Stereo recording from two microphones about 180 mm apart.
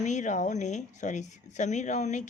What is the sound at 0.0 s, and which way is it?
A woman's voice, 40° left (ahead or behind).